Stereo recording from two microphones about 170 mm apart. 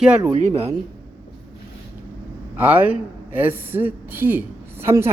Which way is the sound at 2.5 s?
10° right (ahead or behind).